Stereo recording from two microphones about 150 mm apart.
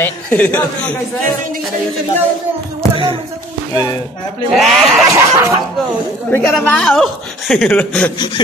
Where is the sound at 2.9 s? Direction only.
35° right (ahead or behind).